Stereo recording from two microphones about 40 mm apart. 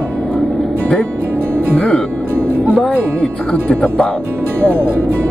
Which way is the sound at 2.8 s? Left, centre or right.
Left.